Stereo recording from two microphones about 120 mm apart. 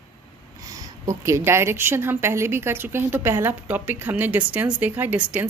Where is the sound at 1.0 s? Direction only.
25° right (ahead or behind).